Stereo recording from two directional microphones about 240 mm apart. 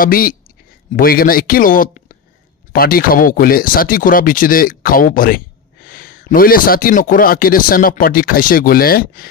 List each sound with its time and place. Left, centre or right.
0.0 s a man's voice: left